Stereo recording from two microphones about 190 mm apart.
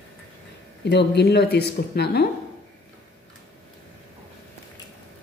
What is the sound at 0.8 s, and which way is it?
Speech, 60° left (ahead or behind).